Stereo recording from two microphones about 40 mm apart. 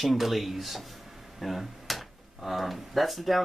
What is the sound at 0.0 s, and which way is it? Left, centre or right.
Speech, centre.